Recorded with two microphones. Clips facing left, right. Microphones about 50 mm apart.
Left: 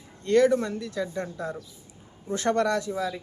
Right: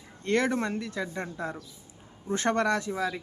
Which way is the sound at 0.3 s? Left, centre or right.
Right.